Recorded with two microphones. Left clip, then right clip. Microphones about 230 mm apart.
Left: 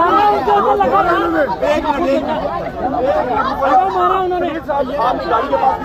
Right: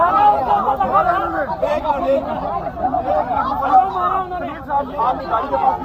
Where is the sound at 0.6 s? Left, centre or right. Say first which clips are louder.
Left 4 dB; left.